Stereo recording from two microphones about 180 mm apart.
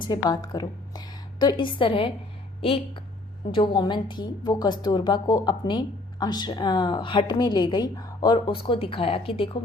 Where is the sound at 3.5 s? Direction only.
25° left (ahead or behind).